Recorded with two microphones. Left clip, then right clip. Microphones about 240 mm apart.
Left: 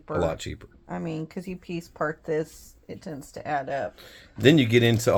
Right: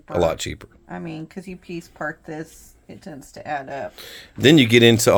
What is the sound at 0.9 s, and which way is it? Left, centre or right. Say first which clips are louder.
Speech: even; left.